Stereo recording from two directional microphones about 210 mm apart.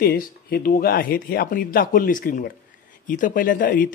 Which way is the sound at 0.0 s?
45° left (ahead or behind).